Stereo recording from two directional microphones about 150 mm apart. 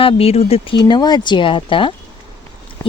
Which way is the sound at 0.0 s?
40° left (ahead or behind).